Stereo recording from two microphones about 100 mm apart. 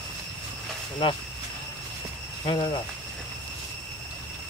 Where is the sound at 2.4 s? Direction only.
50° left (ahead or behind).